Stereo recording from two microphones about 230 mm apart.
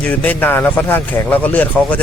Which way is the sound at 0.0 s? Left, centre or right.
Centre.